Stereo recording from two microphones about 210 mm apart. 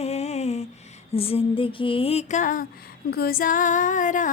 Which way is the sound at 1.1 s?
25° left (ahead or behind).